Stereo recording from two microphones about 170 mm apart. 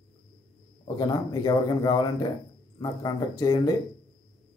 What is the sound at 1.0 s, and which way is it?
A man's voice, 25° left (ahead or behind).